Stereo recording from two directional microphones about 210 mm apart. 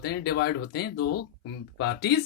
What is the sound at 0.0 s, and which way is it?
Speech, 50° left (ahead or behind).